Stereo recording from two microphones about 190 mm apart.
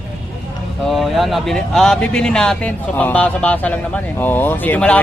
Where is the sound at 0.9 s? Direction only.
Centre (ahead or behind).